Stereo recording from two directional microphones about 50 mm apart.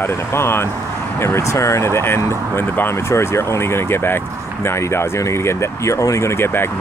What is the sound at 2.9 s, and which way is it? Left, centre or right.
Speech, left.